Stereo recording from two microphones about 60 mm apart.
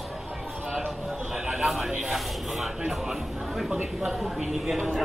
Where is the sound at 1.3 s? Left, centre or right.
Centre.